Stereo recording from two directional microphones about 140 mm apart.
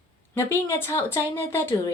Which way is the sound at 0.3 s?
20° left (ahead or behind).